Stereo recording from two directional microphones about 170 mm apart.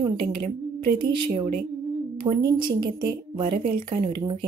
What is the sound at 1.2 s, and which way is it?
Speech, 25° right (ahead or behind).